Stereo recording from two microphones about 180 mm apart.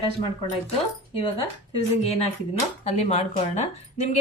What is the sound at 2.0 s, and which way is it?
A woman's voice, 35° left (ahead or behind).